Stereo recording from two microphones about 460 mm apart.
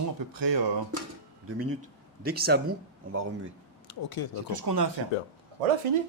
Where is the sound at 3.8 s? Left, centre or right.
Left.